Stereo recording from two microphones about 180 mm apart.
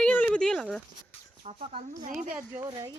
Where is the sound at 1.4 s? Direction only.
35° right (ahead or behind).